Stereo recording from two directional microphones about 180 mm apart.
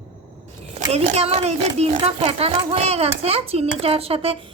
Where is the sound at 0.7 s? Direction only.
40° right (ahead or behind).